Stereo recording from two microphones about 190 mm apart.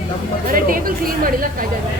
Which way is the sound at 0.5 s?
50° right (ahead or behind).